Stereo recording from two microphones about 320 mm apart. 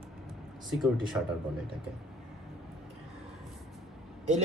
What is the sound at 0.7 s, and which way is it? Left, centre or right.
Speech, centre.